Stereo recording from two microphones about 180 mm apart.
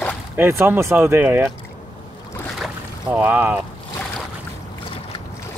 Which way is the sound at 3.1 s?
10° right (ahead or behind).